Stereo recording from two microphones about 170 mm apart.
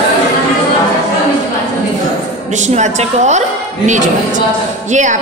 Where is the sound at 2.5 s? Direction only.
45° right (ahead or behind).